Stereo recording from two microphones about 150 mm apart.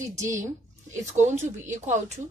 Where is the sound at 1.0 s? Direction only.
55° right (ahead or behind).